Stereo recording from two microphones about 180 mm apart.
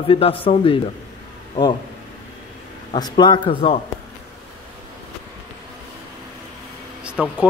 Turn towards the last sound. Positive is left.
turn(degrees=-5)  # may be behind; listen again after turning